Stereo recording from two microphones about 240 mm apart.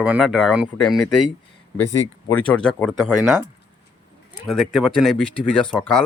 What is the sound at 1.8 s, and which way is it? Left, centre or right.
Speech, left.